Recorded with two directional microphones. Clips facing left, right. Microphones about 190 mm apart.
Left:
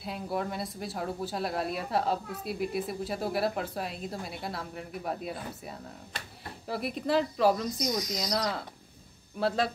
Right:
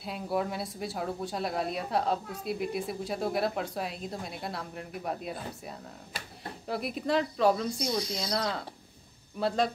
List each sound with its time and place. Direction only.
0.0 s speech: centre (ahead or behind)
7.7 s speech: 30° right (ahead or behind)
8.3 s speech: centre (ahead or behind)